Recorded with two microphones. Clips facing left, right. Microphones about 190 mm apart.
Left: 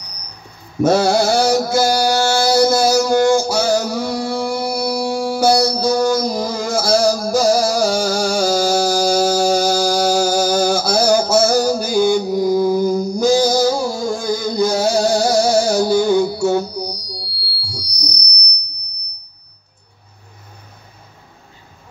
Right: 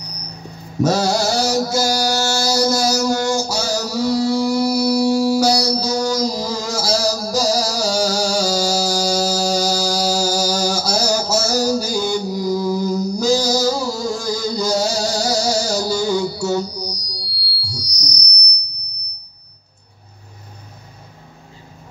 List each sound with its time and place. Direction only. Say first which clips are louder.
0.8 s mantra: left 4 dB; 55° left (ahead or behind)